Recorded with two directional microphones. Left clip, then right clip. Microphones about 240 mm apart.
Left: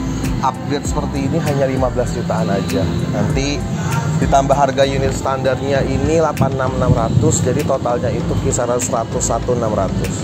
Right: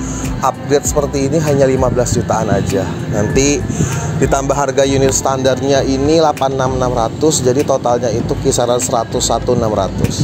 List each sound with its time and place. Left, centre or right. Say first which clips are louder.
0.4 s speech: right 6 dB; right
4.3 s speech: left 4 dB; right